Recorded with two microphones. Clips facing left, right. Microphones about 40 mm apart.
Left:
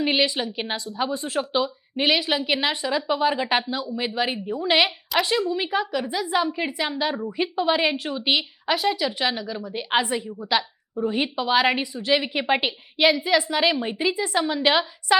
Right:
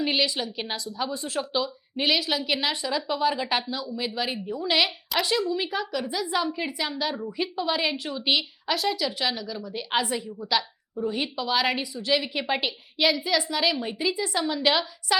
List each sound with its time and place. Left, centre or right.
0.0 s a woman's voice: left